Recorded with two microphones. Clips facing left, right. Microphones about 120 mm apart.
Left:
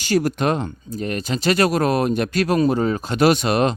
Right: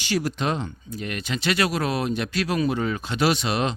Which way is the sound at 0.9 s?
40° left (ahead or behind).